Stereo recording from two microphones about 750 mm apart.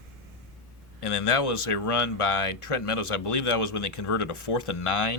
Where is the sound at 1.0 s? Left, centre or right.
Left.